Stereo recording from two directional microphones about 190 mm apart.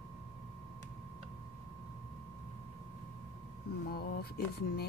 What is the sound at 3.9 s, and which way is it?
Speech, 55° left (ahead or behind).